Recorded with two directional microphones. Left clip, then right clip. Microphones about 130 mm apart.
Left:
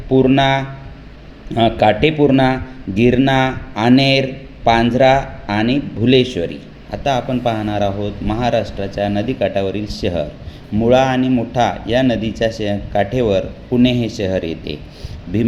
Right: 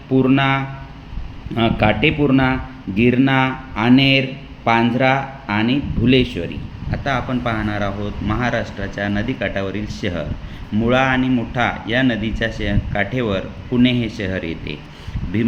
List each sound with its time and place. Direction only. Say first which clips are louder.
0.1 s a man's voice: left 3 dB; 25° left (ahead or behind)